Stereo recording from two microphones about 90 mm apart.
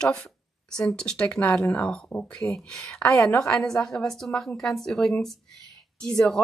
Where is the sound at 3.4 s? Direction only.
5° left (ahead or behind).